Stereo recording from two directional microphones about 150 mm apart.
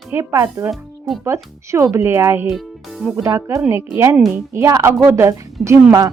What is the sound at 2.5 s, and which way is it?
Music, centre (ahead or behind).